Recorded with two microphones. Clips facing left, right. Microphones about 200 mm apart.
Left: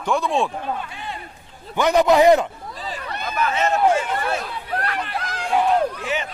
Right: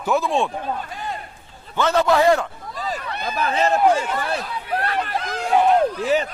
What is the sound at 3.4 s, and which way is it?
Speech, 35° right (ahead or behind).